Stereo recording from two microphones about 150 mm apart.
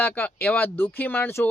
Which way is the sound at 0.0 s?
10° left (ahead or behind).